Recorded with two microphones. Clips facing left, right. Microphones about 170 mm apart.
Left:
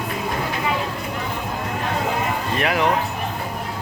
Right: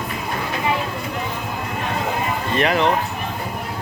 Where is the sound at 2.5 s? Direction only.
5° left (ahead or behind).